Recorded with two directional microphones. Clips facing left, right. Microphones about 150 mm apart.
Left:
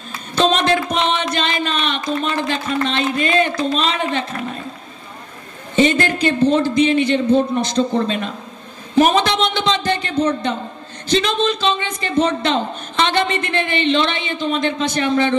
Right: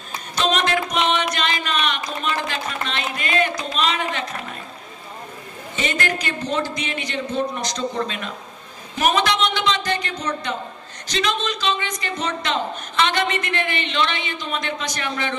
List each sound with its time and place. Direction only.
0.4 s music: 30° left (ahead or behind)
1.3 s a sound: 30° left (ahead or behind)
2.9 s a woman's voice: 30° left (ahead or behind)
5.8 s a woman's voice: 30° left (ahead or behind)